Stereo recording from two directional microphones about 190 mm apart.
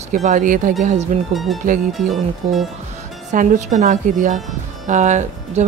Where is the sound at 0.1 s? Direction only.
40° right (ahead or behind).